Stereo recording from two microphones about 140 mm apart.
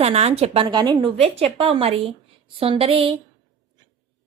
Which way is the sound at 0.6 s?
30° right (ahead or behind).